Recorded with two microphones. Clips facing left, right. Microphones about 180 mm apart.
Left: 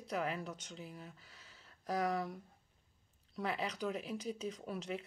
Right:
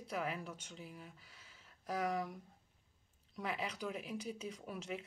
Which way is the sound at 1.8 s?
10° right (ahead or behind).